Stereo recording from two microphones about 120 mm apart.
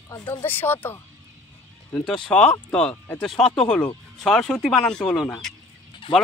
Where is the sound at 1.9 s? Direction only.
5° left (ahead or behind).